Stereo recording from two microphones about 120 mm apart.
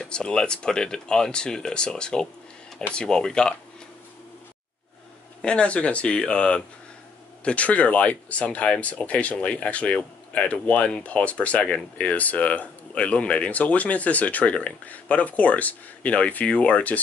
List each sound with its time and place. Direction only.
0.0 s speech: 5° left (ahead or behind)
5.4 s speech: 10° left (ahead or behind)